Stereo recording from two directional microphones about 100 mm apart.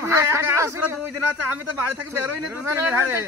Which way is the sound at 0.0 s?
30° right (ahead or behind).